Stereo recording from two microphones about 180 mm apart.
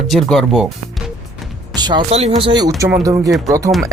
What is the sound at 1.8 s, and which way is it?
Music, 25° right (ahead or behind).